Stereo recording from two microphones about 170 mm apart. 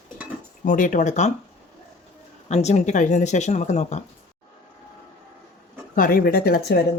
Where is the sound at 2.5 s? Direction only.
40° left (ahead or behind).